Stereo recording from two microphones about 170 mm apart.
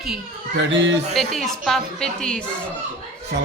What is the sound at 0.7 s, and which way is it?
Speech, 90° right.